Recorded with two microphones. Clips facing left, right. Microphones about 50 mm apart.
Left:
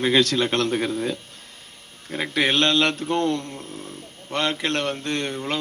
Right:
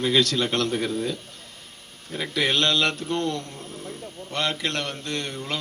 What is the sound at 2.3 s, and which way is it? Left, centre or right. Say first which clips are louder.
Speech: left 2 dB; left.